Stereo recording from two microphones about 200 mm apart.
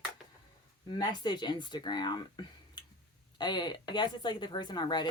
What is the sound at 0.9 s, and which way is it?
Speech, 20° left (ahead or behind).